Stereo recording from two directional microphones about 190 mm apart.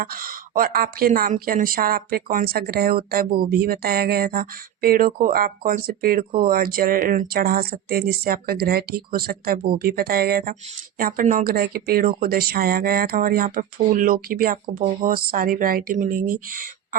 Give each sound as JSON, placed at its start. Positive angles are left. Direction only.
{"t": 0.0, "sound": "a woman's voice", "side_deg": -50}